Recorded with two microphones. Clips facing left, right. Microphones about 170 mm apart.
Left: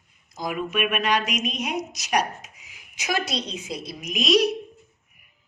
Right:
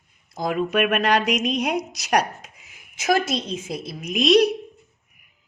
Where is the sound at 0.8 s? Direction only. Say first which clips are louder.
Right 2 dB; 60° right (ahead or behind).